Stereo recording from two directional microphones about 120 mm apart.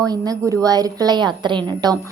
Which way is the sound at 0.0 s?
30° right (ahead or behind).